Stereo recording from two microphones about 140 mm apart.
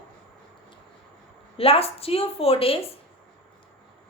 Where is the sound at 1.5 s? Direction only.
45° left (ahead or behind).